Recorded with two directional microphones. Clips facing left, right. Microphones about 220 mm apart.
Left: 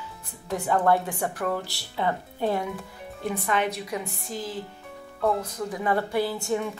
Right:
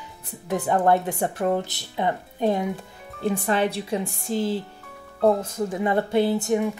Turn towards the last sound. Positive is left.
turn(degrees=-20)  # may be behind; listen again after turning